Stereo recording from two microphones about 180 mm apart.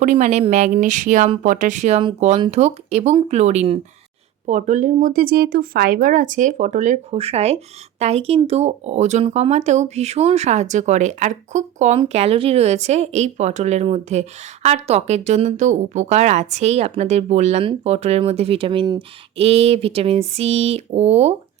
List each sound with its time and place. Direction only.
0.0 s speech: 40° right (ahead or behind)